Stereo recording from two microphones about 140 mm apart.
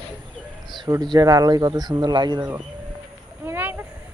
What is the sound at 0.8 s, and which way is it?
Speech, 30° right (ahead or behind).